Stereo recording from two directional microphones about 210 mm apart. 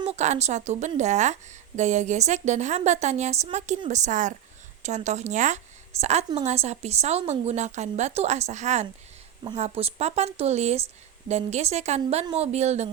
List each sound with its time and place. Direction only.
0.0 s a woman's voice: 30° right (ahead or behind)